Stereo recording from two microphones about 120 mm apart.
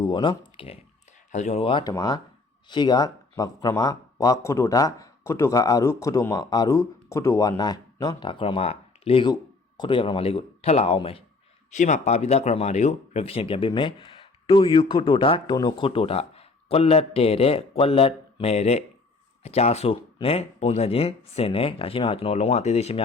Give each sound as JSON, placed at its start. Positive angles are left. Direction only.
{"t": 0.0, "sound": "speech", "side_deg": 40}
{"t": 1.3, "sound": "speech", "side_deg": 70}
{"t": 1.6, "sound": "speech", "side_deg": 40}
{"t": 9.3, "sound": "speech", "side_deg": 35}
{"t": 11.7, "sound": "speech", "side_deg": 85}